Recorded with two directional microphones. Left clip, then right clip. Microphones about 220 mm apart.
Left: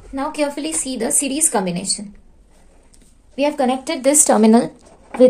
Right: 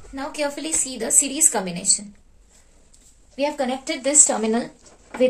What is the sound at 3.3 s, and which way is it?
A woman's voice, 45° left (ahead or behind).